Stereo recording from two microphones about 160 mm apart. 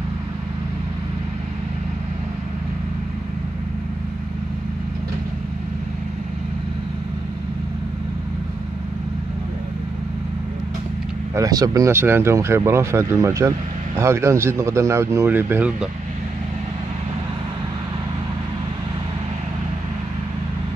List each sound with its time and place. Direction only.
11.3 s speech: 20° right (ahead or behind)